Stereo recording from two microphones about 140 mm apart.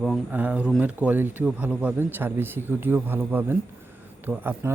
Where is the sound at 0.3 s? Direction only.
10° right (ahead or behind).